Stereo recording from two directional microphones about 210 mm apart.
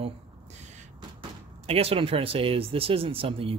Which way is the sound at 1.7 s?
30° right (ahead or behind).